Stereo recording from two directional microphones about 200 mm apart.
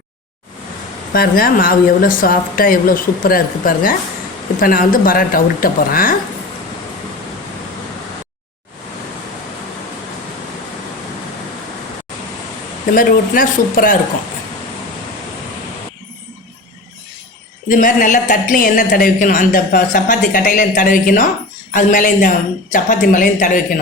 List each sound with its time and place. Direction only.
1.1 s speech: 45° left (ahead or behind)
12.9 s speech: 45° left (ahead or behind)
17.7 s a woman's voice: 40° left (ahead or behind)